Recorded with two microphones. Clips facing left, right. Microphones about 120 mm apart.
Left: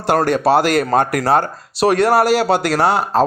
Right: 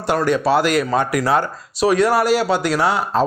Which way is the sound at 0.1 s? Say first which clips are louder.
Left 3 dB; 55° left (ahead or behind).